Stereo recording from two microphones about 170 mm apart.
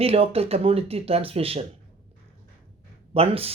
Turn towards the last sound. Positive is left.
turn(degrees=-35)  # may be behind; listen again after turning